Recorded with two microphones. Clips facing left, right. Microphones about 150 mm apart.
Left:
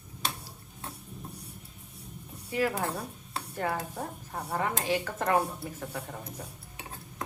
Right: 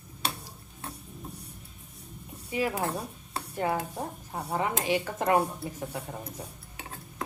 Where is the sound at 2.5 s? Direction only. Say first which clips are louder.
Even; 10° right (ahead or behind).